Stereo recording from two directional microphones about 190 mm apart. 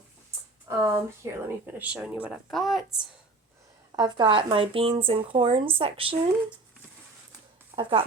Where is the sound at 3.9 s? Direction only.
20° right (ahead or behind).